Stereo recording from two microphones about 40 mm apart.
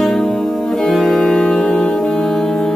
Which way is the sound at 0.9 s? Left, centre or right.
Centre.